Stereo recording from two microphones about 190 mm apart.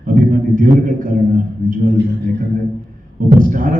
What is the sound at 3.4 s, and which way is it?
Speech, 45° right (ahead or behind).